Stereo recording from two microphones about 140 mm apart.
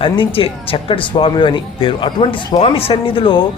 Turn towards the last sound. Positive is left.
turn(degrees=40)  # may be behind; listen again after turning